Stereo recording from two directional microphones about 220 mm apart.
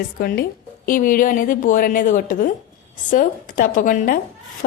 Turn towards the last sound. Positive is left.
turn(degrees=40)  # may be behind; listen again after turning